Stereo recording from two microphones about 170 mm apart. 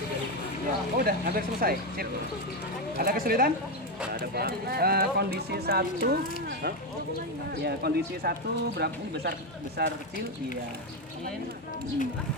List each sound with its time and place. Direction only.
0.9 s speech: 60° right (ahead or behind)